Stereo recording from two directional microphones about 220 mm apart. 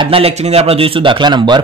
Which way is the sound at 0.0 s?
25° right (ahead or behind).